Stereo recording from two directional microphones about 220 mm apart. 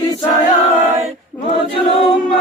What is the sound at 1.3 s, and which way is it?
Speech, 5° left (ahead or behind).